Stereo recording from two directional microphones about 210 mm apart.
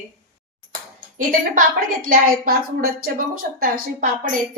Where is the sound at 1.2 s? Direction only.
40° right (ahead or behind).